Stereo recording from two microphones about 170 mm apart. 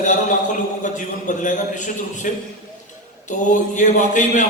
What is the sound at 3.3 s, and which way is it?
A man's voice, 45° left (ahead or behind).